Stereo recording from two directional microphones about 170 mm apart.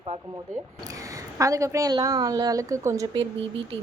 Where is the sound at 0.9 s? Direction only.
20° right (ahead or behind).